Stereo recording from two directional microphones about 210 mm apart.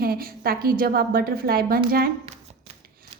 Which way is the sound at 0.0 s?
45° right (ahead or behind).